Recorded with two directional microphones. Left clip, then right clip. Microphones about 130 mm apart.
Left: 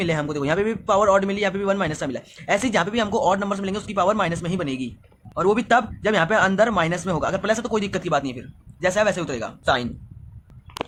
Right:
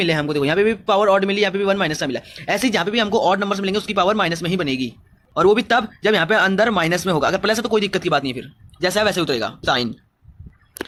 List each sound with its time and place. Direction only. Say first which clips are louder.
0.0 s a man's voice: right 5 dB; 35° right (ahead or behind); by 9.9 s 50° right (ahead or behind)